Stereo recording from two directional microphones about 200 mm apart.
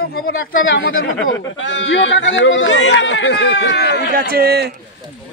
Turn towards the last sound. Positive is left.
turn(degrees=-50)  # may be behind; listen again after turning